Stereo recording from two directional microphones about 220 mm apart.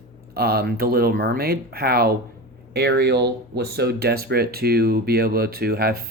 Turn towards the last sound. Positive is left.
turn(degrees=-45)  # may be behind; listen again after turning